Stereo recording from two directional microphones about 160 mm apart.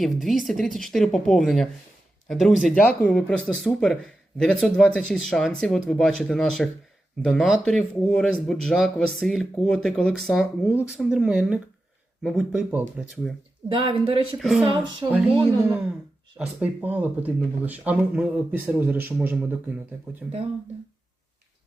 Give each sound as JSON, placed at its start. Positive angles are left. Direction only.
{"t": 0.0, "sound": "a man's voice", "side_deg": 0}
{"t": 13.7, "sound": "speech", "side_deg": -35}
{"t": 14.3, "sound": "a man's voice", "side_deg": 0}
{"t": 15.0, "sound": "speech", "side_deg": -30}
{"t": 16.6, "sound": "speech", "side_deg": -10}